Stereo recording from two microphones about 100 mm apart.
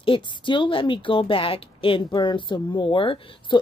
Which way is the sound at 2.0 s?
45° left (ahead or behind).